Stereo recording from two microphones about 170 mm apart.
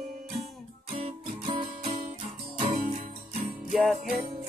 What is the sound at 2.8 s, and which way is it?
Music, 50° right (ahead or behind).